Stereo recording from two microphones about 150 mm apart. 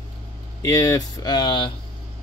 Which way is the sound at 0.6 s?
25° left (ahead or behind).